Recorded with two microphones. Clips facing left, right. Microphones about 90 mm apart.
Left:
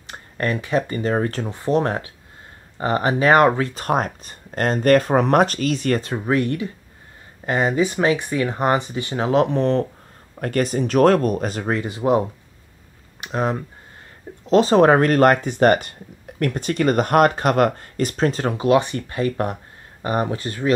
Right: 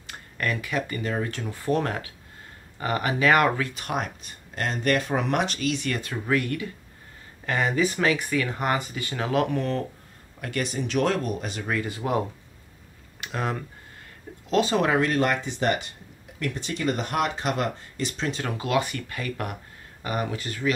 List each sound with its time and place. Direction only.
0.0 s speech: 35° left (ahead or behind)
1.5 s speech: 20° left (ahead or behind)
10.4 s speech: 40° left (ahead or behind)
11.7 s speech: 25° left (ahead or behind)
13.2 s speech: 25° left (ahead or behind)
14.5 s speech: 35° left (ahead or behind)
18.6 s speech: 30° left (ahead or behind)